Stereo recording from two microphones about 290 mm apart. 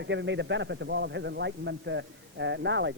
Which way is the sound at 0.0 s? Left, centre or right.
Right.